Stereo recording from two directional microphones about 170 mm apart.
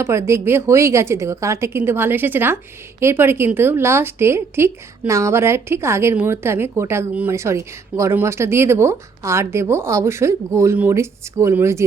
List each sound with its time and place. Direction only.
0.0 s a woman's voice: 15° right (ahead or behind)